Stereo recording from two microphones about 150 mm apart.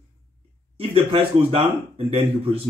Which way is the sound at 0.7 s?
40° right (ahead or behind).